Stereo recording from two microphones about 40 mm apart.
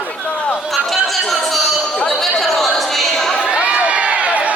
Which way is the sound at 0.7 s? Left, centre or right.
Centre.